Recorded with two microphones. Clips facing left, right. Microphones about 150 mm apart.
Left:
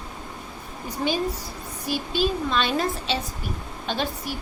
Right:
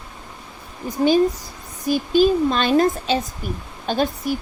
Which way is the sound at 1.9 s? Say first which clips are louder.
Right 9 dB; 45° right (ahead or behind).